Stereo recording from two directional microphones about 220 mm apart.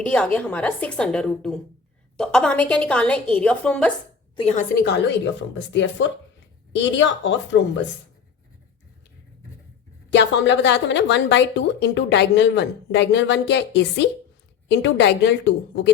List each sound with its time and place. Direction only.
0.0 s a woman's voice: 5° left (ahead or behind)
4.4 s a woman's voice: 30° left (ahead or behind)
4.7 s a woman's voice: 45° left (ahead or behind)
10.1 s a woman's voice: 55° left (ahead or behind)